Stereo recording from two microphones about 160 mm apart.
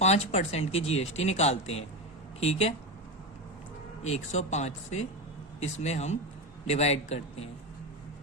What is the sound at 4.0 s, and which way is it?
Speech, 45° left (ahead or behind).